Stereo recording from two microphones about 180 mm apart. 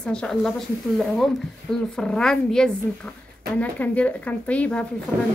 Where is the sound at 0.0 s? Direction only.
5° left (ahead or behind).